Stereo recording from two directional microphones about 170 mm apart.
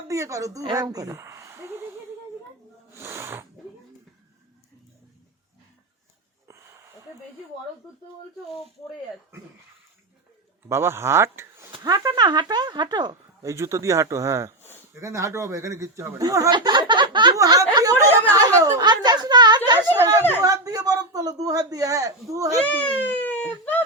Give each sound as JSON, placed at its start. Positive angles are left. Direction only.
{"t": 0.1, "sound": "a woman's voice", "side_deg": -20}
{"t": 2.9, "sound": "snake", "side_deg": -15}
{"t": 6.5, "sound": "a sound", "side_deg": -20}
{"t": 10.7, "sound": "speech", "side_deg": -15}
{"t": 11.8, "sound": "speech", "side_deg": -25}
{"t": 22.6, "sound": "a sound", "side_deg": 10}